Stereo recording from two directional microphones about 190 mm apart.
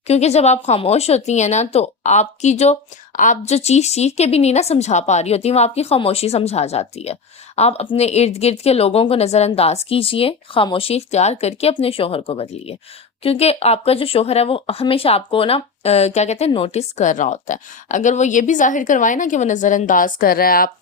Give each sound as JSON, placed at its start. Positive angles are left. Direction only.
{"t": 0.1, "sound": "speech", "side_deg": 35}